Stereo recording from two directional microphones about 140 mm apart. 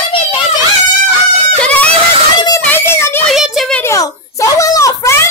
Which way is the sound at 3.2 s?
Centre (ahead or behind).